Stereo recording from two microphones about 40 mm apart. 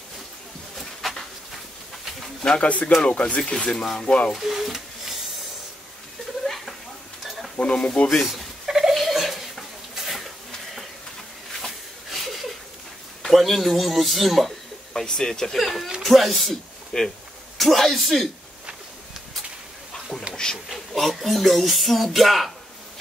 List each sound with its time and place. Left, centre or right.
1.0 s a sound: centre
2.6 s speech: left
3.6 s speech: centre
4.4 s speech: centre
6.4 s a sound: centre
7.6 s speech: left
8.3 s a sound: centre
11.6 s a sound: centre
13.3 s speech: centre
15.0 s speech: centre
16.9 s speech: left
17.6 s speech: centre
20.4 s speech: centre
20.9 s speech: centre